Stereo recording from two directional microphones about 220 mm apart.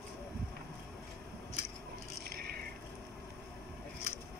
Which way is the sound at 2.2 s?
45° right (ahead or behind).